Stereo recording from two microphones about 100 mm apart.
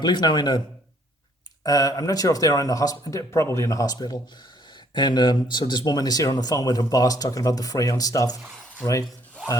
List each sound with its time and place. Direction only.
0.0 s speech: 45° left (ahead or behind)
1.6 s speech: 40° left (ahead or behind)